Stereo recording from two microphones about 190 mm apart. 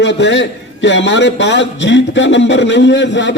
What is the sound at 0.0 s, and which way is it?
A man's voice, 65° left (ahead or behind).